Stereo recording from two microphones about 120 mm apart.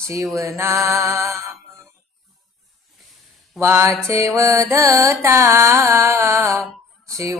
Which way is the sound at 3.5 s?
20° right (ahead or behind).